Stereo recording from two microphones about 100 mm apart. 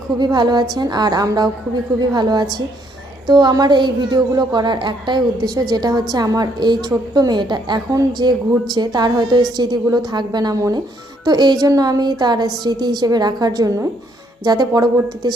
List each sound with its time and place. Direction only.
0.2 s a woman's voice: 45° right (ahead or behind)